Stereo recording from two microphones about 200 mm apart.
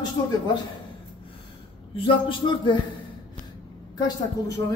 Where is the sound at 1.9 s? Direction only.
25° left (ahead or behind).